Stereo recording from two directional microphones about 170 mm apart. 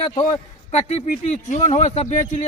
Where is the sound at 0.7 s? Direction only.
40° left (ahead or behind).